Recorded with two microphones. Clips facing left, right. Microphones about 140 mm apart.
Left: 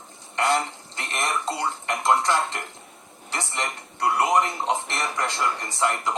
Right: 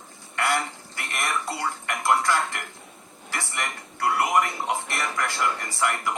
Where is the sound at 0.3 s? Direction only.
20° left (ahead or behind).